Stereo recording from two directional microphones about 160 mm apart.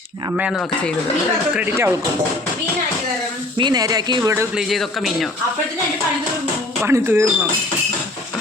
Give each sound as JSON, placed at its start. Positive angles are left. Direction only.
{"t": 1.5, "sound": "speech", "side_deg": -15}
{"t": 3.6, "sound": "speech", "side_deg": -25}
{"t": 4.5, "sound": "speech", "side_deg": 0}
{"t": 6.8, "sound": "speech", "side_deg": -15}